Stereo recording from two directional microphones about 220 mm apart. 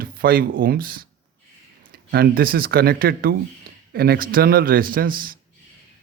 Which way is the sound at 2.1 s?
45° right (ahead or behind).